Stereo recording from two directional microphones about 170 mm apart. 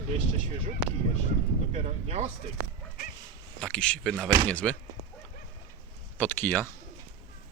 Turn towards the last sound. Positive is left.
turn(degrees=10)  # may be behind; listen again after turning